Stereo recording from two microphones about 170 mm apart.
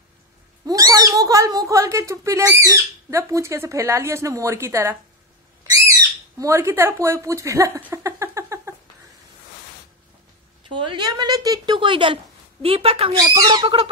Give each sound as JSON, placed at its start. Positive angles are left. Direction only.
{"t": 0.7, "sound": "speech", "side_deg": -20}
{"t": 6.3, "sound": "speech", "side_deg": -15}
{"t": 10.9, "sound": "a woman's voice", "side_deg": -25}
{"t": 13.2, "sound": "a woman's voice", "side_deg": -20}